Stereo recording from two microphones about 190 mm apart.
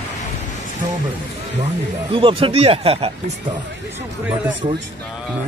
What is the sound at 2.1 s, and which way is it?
Speech, 30° right (ahead or behind).